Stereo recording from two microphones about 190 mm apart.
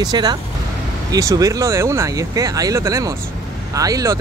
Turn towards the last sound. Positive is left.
turn(degrees=-20)  # may be behind; listen again after turning